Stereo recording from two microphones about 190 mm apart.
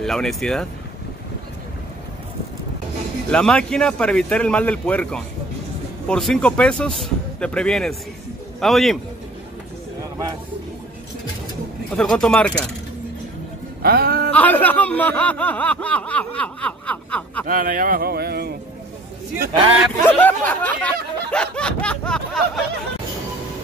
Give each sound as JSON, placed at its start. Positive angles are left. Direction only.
{"t": 0.0, "sound": "speech", "side_deg": 5}
{"t": 3.3, "sound": "speech", "side_deg": 5}
{"t": 12.0, "sound": "speech", "side_deg": 5}
{"t": 13.8, "sound": "music", "side_deg": -55}
{"t": 14.3, "sound": "speech", "side_deg": 10}
{"t": 17.5, "sound": "speech", "side_deg": -45}
{"t": 20.1, "sound": "speech", "side_deg": 10}
{"t": 21.3, "sound": "snicker", "side_deg": 5}